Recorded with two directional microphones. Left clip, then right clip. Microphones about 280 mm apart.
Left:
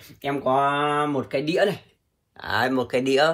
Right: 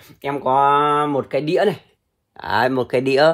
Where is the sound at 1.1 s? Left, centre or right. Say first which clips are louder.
Right 5 dB; right.